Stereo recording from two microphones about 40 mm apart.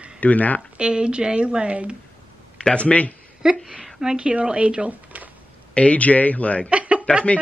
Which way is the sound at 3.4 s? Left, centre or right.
Centre.